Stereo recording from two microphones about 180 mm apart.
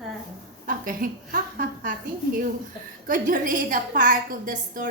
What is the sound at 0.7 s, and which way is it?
A woman's voice, 50° right (ahead or behind).